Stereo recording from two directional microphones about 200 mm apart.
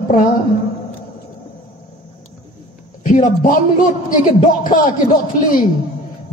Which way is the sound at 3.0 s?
40° left (ahead or behind).